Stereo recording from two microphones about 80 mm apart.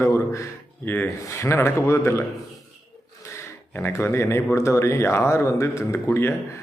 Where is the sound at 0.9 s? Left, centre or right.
Left.